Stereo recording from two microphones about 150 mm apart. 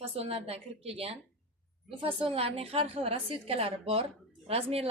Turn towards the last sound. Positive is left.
turn(degrees=-40)  # may be behind; listen again after turning